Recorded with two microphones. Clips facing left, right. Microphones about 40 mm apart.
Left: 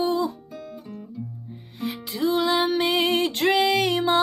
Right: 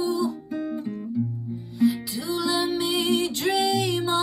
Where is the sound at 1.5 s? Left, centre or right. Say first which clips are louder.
Right 10 dB; left.